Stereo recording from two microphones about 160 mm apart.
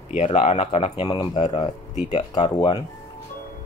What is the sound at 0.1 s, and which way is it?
Speech, 45° left (ahead or behind).